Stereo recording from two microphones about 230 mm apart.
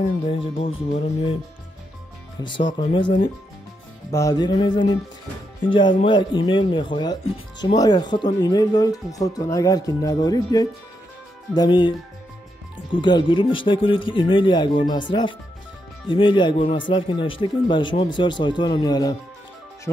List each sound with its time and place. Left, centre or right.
0.3 s speech: left
2.4 s speech: centre
12.9 s speech: left